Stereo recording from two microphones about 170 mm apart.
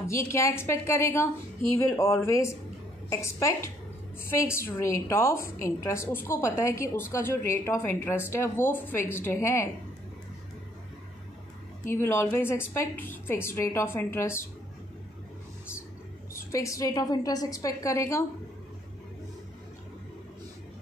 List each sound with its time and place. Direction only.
0.3 s a woman's voice: 15° left (ahead or behind)
11.9 s a woman's voice: 15° left (ahead or behind)
16.5 s a woman's voice: 20° left (ahead or behind)